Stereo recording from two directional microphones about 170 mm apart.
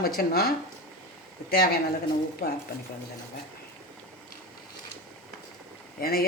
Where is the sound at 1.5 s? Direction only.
70° left (ahead or behind).